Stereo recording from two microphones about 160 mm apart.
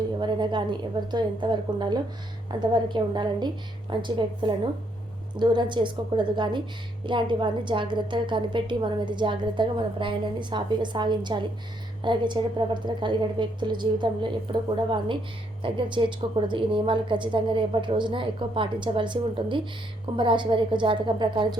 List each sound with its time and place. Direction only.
0.2 s a woman's voice: 30° right (ahead or behind)